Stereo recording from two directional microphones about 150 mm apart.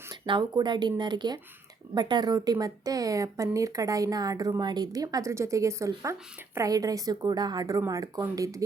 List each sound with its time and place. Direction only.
0.1 s speech: 30° right (ahead or behind)